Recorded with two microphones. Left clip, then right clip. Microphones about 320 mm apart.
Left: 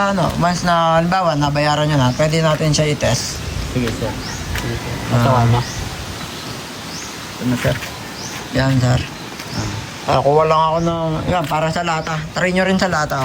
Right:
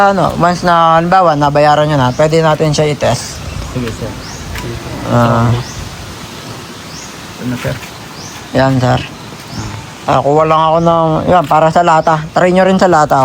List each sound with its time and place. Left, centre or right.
0.0 s speech: centre
5.1 s speech: centre
7.5 s speech: centre
10.3 s speech: centre
10.8 s speech: right
11.3 s speech: centre